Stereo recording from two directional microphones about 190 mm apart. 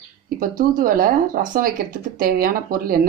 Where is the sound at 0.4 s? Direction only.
50° right (ahead or behind).